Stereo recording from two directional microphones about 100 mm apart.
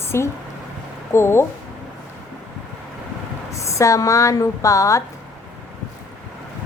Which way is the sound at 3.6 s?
30° left (ahead or behind).